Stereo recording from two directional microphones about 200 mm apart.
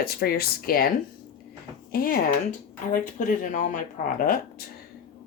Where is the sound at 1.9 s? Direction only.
45° left (ahead or behind).